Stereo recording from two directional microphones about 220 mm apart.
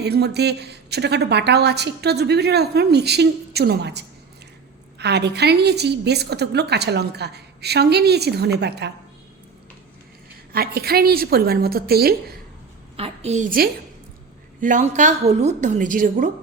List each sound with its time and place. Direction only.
0.0 s a woman's voice: 50° right (ahead or behind)
10.5 s a woman's voice: 45° right (ahead or behind)
13.0 s a woman's voice: 30° right (ahead or behind)